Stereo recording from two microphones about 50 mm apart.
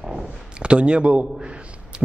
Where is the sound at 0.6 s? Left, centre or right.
Right.